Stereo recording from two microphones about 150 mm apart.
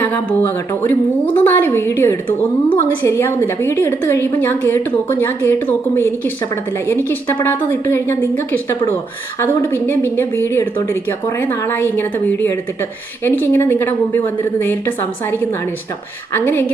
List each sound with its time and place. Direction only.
0.0 s a woman's voice: 15° left (ahead or behind)